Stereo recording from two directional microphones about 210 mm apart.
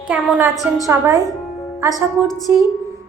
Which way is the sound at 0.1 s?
5° right (ahead or behind).